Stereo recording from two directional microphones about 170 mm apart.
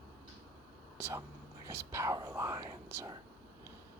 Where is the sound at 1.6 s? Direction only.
15° right (ahead or behind).